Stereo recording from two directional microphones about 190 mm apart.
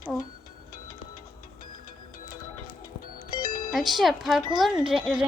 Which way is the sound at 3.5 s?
45° left (ahead or behind).